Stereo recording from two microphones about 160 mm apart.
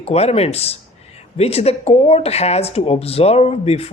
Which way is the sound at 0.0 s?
40° left (ahead or behind).